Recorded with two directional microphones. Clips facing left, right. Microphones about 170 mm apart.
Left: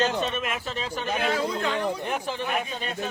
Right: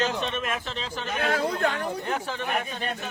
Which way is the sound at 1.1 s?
55° right (ahead or behind).